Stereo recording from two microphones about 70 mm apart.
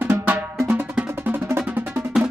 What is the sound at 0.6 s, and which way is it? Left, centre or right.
Drum, right.